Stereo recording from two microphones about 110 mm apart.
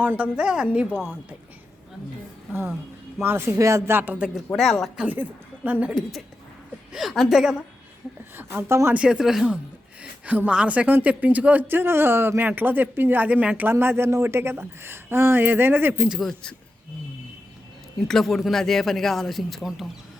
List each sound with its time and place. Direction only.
0.0 s a woman's voice: 15° right (ahead or behind)
2.5 s speech: 20° right (ahead or behind)
4.5 s a man's voice: centre (ahead or behind)
5.6 s a woman's voice: 15° right (ahead or behind)
6.9 s a man's voice: centre (ahead or behind)
8.4 s speech: 20° right (ahead or behind)
9.0 s a man's voice: 5° right (ahead or behind)
10.0 s a woman's voice: 15° right (ahead or behind)
16.0 s a man's voice: centre (ahead or behind)
18.1 s a man's voice: 5° left (ahead or behind)